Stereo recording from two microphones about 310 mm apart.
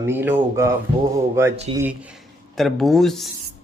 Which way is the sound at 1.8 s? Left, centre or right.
Centre.